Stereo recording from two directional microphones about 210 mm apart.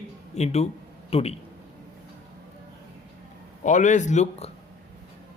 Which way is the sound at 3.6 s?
35° left (ahead or behind).